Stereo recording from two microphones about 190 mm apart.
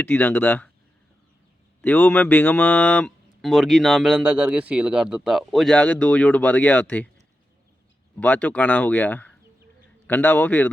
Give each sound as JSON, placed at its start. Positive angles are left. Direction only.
{"t": 0.0, "sound": "speech", "side_deg": 10}
{"t": 1.8, "sound": "speech", "side_deg": 10}
{"t": 8.2, "sound": "speech", "side_deg": 10}